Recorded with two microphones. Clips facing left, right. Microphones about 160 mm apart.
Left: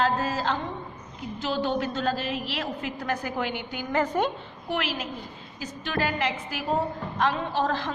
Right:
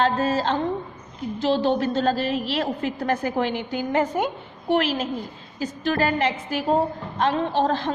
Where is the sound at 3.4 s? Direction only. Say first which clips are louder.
Right 6 dB; 30° right (ahead or behind).